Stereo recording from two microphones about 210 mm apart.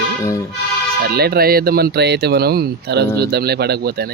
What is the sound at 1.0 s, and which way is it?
Speech, 50° right (ahead or behind).